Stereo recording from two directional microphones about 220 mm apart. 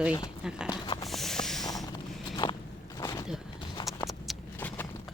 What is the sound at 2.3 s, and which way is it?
Walk, 20° left (ahead or behind).